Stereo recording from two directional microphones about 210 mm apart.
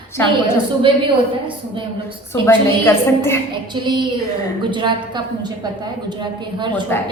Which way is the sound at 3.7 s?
20° right (ahead or behind).